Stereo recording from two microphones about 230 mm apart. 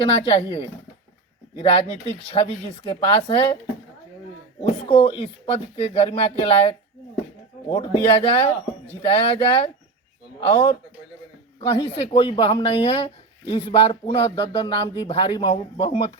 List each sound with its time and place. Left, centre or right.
0.0 s speech: left
4.6 s speech: left